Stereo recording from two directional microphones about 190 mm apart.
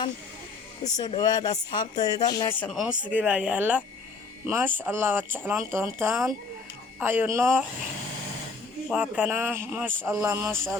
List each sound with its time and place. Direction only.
0.9 s speech: 20° left (ahead or behind)
2.6 s speech: centre (ahead or behind)
8.9 s speech: 10° right (ahead or behind)
10.2 s speech: 15° right (ahead or behind)